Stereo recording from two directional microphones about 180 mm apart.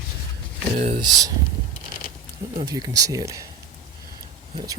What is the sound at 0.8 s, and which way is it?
Speech, 45° right (ahead or behind).